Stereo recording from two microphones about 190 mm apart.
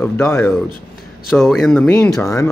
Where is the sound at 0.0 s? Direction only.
10° left (ahead or behind).